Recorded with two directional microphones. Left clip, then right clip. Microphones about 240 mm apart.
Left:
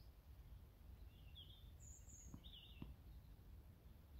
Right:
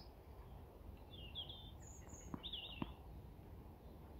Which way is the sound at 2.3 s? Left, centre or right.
Right.